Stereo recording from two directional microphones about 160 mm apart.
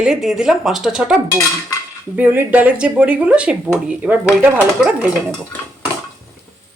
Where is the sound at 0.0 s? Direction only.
5° right (ahead or behind).